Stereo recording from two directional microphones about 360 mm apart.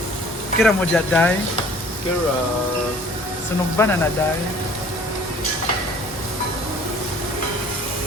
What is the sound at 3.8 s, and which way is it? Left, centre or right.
Speech, centre.